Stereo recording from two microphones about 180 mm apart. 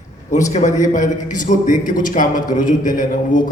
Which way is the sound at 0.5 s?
40° left (ahead or behind).